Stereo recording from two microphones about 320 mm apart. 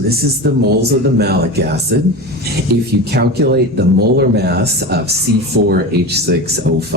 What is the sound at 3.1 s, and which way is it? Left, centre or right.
Speech, right.